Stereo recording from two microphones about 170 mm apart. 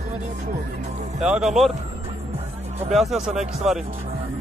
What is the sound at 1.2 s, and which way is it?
Speech, 5° right (ahead or behind).